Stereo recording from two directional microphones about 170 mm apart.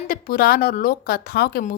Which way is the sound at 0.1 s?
60° left (ahead or behind).